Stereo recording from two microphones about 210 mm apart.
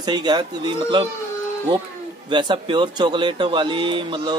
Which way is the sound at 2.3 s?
20° right (ahead or behind).